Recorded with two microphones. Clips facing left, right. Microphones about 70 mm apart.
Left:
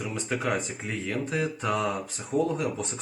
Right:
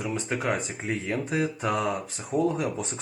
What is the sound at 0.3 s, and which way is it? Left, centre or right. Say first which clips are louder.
Speech: left 1 dB; right.